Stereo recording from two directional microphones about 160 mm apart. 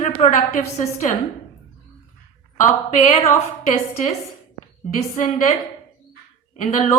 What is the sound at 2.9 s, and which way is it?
Speech, 45° left (ahead or behind).